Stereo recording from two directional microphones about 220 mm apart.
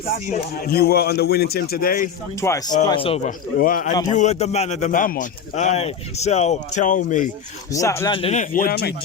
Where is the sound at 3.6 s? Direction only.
40° left (ahead or behind).